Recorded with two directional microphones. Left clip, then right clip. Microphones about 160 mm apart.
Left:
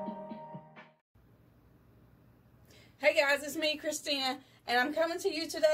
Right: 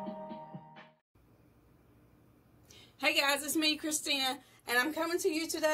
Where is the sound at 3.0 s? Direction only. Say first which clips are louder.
Left 2 dB; 45° right (ahead or behind).